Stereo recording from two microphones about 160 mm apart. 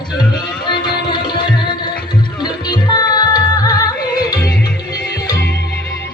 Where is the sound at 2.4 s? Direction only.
25° left (ahead or behind).